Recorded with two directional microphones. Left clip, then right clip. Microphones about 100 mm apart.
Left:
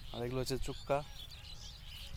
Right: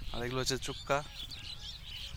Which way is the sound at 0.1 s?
20° left (ahead or behind).